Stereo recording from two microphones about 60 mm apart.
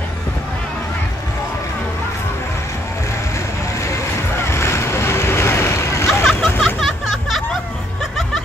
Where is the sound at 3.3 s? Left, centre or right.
Left.